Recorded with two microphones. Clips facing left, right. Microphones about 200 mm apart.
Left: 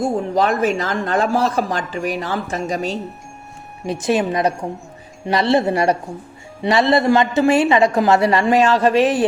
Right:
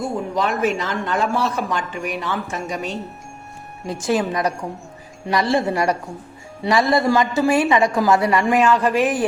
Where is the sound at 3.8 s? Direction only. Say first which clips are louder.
Left 2 dB; 20° left (ahead or behind).